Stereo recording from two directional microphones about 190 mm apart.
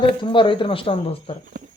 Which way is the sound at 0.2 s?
25° left (ahead or behind).